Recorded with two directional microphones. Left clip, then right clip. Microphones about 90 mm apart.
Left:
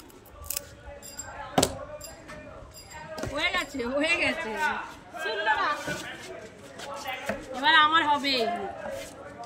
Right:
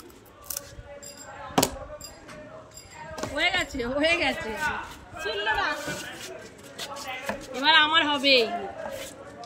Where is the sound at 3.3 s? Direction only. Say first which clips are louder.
Right 3 dB; 25° left (ahead or behind).